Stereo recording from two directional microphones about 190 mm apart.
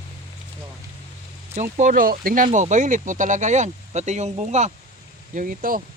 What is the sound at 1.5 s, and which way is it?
Speech, 40° right (ahead or behind).